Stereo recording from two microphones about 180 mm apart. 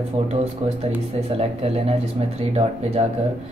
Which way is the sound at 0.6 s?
35° right (ahead or behind).